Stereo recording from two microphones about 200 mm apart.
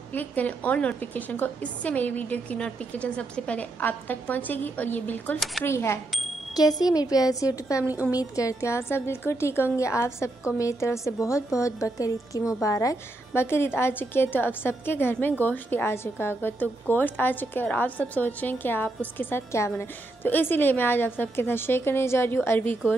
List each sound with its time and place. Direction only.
0.1 s a woman's voice: 10° left (ahead or behind)
5.7 s a woman's voice: 15° left (ahead or behind)
7.8 s a woman's voice: 10° right (ahead or behind)
8.2 s a woman's voice: 15° left (ahead or behind)